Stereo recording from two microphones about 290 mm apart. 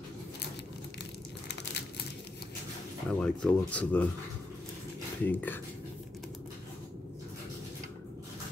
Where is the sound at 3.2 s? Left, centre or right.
Centre.